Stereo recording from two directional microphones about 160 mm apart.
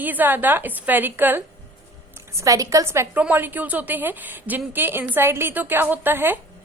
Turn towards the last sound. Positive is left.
turn(degrees=-15)  # may be behind; listen again after turning